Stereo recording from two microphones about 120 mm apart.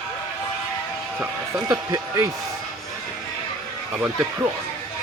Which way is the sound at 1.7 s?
30° right (ahead or behind).